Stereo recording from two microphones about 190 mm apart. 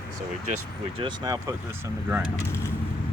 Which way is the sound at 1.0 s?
25° right (ahead or behind).